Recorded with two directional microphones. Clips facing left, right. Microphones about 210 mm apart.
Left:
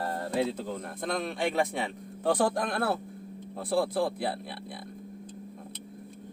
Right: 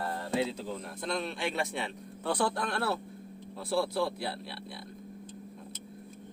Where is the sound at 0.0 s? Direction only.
45° left (ahead or behind).